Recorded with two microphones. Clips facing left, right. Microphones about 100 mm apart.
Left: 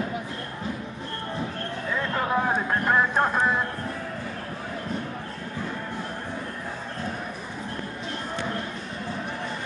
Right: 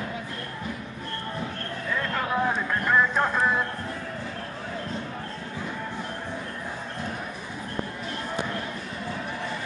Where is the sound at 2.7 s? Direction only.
25° left (ahead or behind).